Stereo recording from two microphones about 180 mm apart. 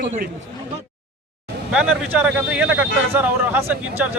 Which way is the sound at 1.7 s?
5° right (ahead or behind).